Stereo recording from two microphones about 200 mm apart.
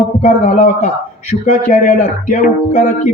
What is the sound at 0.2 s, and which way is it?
Speech, 35° left (ahead or behind).